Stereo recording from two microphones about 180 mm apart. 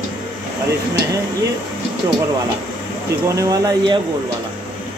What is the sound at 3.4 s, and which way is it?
Speech, 20° right (ahead or behind).